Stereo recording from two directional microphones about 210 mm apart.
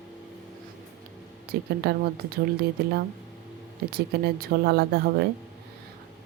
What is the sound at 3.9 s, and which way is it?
Speech, 45° right (ahead or behind).